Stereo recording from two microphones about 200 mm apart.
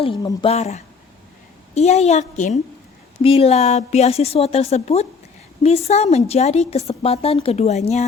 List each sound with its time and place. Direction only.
0.0 s speech: 25° left (ahead or behind)
0.5 s a woman's voice: 35° left (ahead or behind)